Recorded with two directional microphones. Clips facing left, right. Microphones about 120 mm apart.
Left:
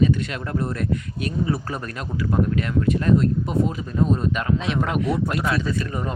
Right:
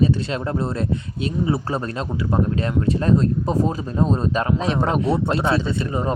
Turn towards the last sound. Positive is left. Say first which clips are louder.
# right 3 dB
turn(degrees=-25)  # may be behind; listen again after turning